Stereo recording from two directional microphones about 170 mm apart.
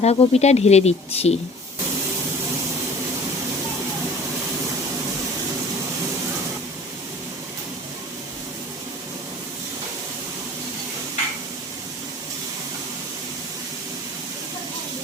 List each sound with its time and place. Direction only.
0.0 s speech: 40° left (ahead or behind)